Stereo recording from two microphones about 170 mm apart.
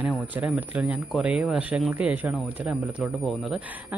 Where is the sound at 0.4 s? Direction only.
10° right (ahead or behind).